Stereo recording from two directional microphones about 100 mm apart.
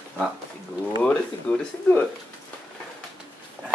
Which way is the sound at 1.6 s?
15° left (ahead or behind).